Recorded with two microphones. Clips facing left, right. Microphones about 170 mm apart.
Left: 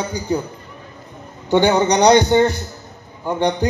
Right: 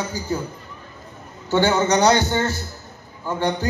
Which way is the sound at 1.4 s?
15° left (ahead or behind).